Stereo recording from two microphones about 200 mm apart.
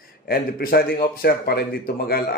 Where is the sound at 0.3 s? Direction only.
50° left (ahead or behind).